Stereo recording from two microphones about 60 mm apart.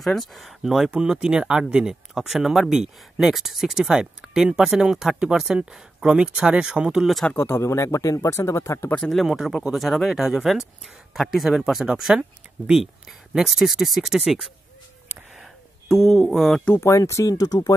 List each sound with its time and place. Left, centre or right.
0.0 s speech: centre
7.3 s speech: left
9.1 s speech: centre
15.9 s speech: centre
16.8 s speech: left